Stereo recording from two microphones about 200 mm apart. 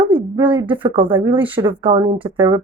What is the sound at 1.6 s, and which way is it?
Speech, 25° right (ahead or behind).